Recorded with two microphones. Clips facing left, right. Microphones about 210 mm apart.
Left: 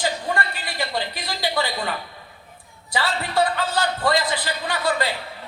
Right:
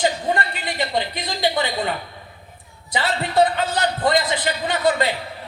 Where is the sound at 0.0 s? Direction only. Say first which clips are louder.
Right 4 dB; 20° right (ahead or behind).